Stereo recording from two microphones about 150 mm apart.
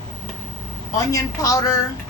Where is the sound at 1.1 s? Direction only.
25° left (ahead or behind).